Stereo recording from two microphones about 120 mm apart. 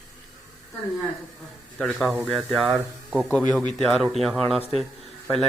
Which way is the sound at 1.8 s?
Centre (ahead or behind).